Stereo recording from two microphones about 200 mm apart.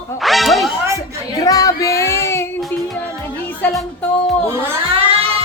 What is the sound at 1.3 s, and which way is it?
Speech, 15° left (ahead or behind).